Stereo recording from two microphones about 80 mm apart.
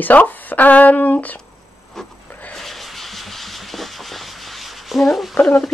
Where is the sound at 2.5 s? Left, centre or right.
Centre.